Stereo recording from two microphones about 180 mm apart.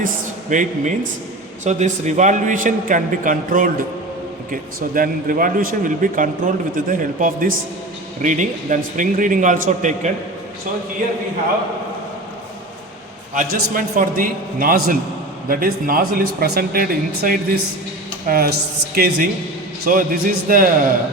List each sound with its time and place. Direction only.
0.5 s a man's voice: 45° right (ahead or behind)
13.3 s a man's voice: 50° right (ahead or behind)